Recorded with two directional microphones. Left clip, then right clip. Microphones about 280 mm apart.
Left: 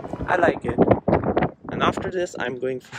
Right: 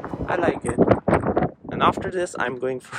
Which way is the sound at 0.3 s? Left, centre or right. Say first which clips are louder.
Left 3 dB; centre.